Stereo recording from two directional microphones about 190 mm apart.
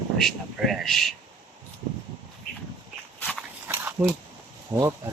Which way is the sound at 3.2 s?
5° left (ahead or behind).